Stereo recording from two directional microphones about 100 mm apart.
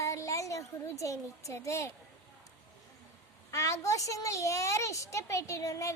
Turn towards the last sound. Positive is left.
turn(degrees=35)  # may be behind; listen again after turning